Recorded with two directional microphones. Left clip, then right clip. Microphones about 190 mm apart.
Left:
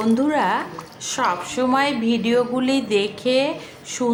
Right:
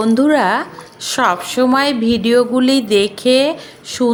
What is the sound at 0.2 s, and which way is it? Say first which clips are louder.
A woman's voice: right 6 dB; 30° right (ahead or behind).